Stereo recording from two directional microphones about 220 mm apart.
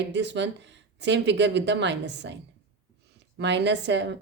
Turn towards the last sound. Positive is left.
turn(degrees=-55)  # may be behind; listen again after turning